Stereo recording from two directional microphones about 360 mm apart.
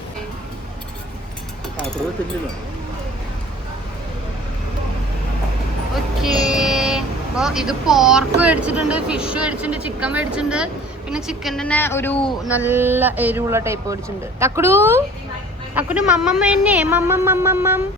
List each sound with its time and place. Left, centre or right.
6.2 s speech: centre
12.5 s speech: centre